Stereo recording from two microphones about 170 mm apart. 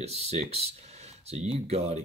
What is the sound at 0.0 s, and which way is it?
Speech, 40° right (ahead or behind).